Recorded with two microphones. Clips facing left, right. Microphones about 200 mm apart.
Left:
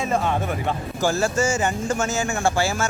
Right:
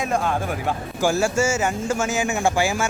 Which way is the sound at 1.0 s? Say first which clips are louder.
Right 1 dB; 10° right (ahead or behind).